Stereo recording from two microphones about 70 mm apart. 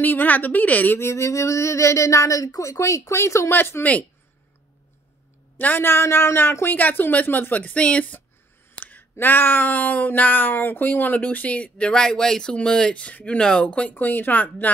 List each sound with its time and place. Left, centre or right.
0.0 s speech: left
0.9 s a woman's voice: left
5.6 s speech: left
8.7 s a sound: left
9.1 s speech: left